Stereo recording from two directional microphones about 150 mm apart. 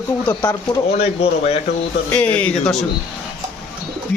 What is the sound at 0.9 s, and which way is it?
Speech, 45° left (ahead or behind).